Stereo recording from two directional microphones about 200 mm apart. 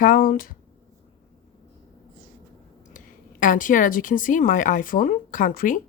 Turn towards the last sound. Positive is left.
turn(degrees=45)  # may be behind; listen again after turning